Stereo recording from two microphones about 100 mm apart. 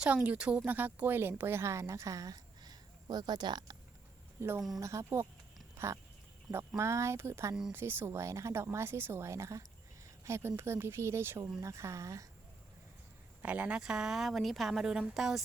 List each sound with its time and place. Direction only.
0.0 s a woman's voice: 15° right (ahead or behind); by 3.8 s 45° right (ahead or behind)
4.4 s a woman's voice: 25° right (ahead or behind)
5.7 s a sound: 30° right (ahead or behind)
6.5 s a woman's voice: 25° right (ahead or behind)
13.4 s speech: 15° right (ahead or behind)